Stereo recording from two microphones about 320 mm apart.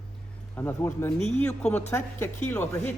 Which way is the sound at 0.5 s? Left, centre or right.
Centre.